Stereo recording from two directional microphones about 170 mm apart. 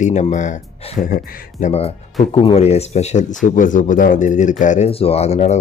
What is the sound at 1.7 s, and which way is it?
Speech, 35° left (ahead or behind).